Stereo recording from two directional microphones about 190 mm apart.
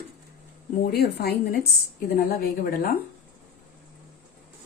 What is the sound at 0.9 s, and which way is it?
Speech, 55° left (ahead or behind).